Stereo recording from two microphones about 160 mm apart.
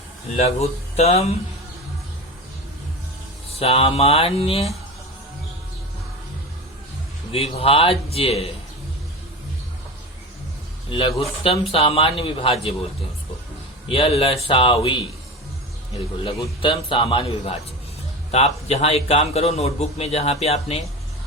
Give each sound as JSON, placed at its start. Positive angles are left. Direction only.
{"t": 0.3, "sound": "a man's voice", "side_deg": 40}
{"t": 3.6, "sound": "a man's voice", "side_deg": 35}
{"t": 7.3, "sound": "a man's voice", "side_deg": 35}
{"t": 10.8, "sound": "a man's voice", "side_deg": 35}
{"t": 13.8, "sound": "a man's voice", "side_deg": 35}
{"t": 16.6, "sound": "a man's voice", "side_deg": 30}
{"t": 18.3, "sound": "a man's voice", "side_deg": 40}